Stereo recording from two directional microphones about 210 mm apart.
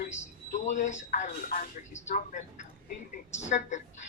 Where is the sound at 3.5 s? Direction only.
35° left (ahead or behind).